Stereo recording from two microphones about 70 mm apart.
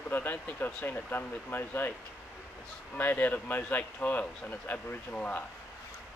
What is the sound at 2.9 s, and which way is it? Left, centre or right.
Speech, left.